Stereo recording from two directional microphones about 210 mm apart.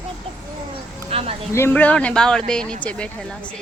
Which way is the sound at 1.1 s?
30° right (ahead or behind).